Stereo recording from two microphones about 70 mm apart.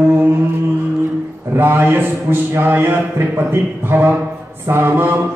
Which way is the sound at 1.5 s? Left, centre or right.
Right.